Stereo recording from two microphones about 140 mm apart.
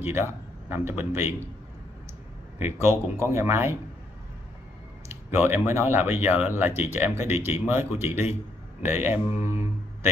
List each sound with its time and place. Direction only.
0.0 s speech: 15° right (ahead or behind)
2.6 s speech: 15° right (ahead or behind)
5.3 s speech: 15° right (ahead or behind)